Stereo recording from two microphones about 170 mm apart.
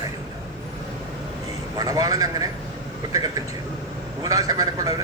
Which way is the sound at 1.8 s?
20° right (ahead or behind).